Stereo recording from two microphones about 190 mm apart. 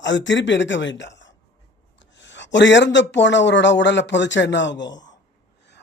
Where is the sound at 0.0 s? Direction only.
70° left (ahead or behind).